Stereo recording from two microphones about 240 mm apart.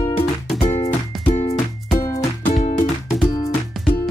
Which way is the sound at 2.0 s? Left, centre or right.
Centre.